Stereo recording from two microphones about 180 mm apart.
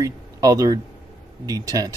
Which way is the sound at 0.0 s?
20° right (ahead or behind).